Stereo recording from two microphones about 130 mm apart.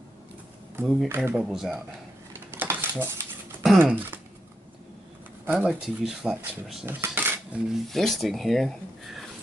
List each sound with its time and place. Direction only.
1.0 s speech: 20° right (ahead or behind)
2.5 s cutlery: 15° right (ahead or behind)
3.7 s speech: 15° right (ahead or behind)
5.5 s speech: 10° right (ahead or behind)
6.9 s cutlery: 15° right (ahead or behind)
7.9 s speech: centre (ahead or behind)